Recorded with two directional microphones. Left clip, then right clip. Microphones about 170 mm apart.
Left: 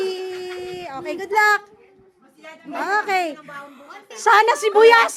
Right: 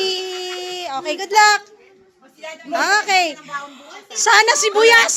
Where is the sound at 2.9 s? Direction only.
25° left (ahead or behind).